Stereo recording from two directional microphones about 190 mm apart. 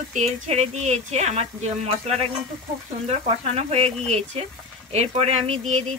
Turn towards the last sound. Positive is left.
turn(degrees=-35)  # may be behind; listen again after turning